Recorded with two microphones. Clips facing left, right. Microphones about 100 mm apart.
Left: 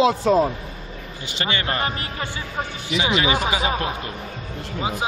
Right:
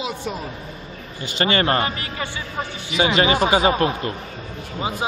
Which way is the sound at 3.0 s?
40° right (ahead or behind).